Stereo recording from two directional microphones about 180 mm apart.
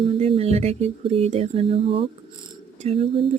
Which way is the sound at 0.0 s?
30° right (ahead or behind).